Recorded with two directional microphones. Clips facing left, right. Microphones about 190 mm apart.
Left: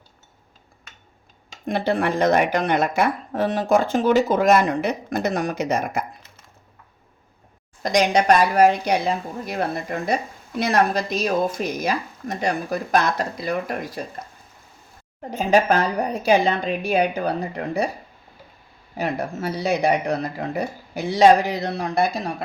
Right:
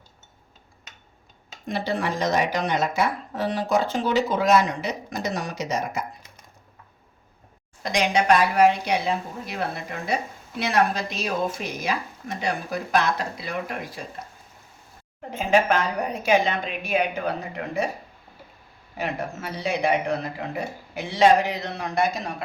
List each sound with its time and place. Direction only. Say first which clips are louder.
1.6 s speech: left 5 dB; 55° left (ahead or behind)
7.8 s speech: left 4 dB; 40° left (ahead or behind)
15.3 s speech: left 3 dB; 40° left (ahead or behind)
18.9 s speech: left 4 dB; 40° left (ahead or behind)